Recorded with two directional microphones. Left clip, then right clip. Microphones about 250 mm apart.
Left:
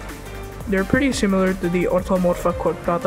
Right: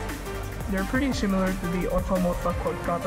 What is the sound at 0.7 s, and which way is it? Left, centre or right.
Speech, left.